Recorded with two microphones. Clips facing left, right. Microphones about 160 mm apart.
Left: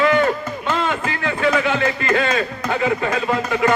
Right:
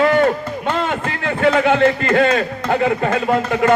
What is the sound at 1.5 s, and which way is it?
A man's voice, 55° right (ahead or behind).